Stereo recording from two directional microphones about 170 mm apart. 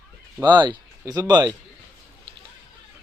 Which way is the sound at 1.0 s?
20° right (ahead or behind).